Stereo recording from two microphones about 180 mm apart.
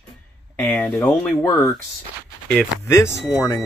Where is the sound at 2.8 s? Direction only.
15° left (ahead or behind).